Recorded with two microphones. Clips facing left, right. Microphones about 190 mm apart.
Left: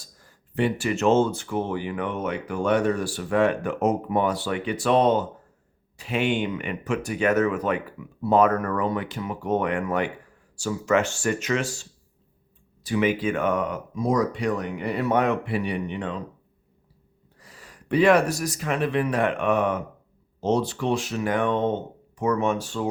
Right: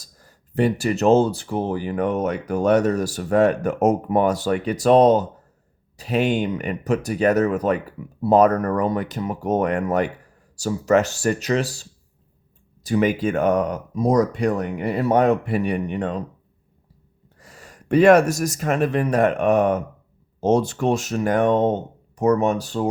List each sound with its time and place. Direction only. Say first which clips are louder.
0.0 s speech: right 1 dB; 40° right (ahead or behind)
17.4 s speech: right 4 dB; 45° right (ahead or behind)